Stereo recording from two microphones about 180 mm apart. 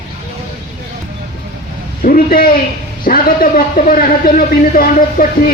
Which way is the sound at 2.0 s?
50° left (ahead or behind).